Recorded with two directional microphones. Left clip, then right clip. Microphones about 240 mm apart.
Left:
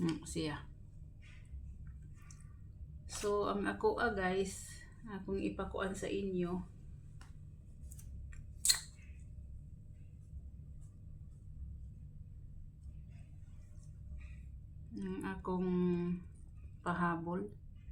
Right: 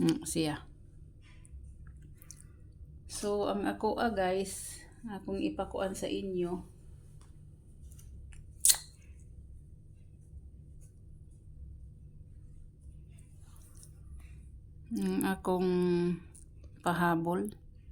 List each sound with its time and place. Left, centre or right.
0.0 s speech: right
3.2 s a woman's voice: right
14.9 s a sound: right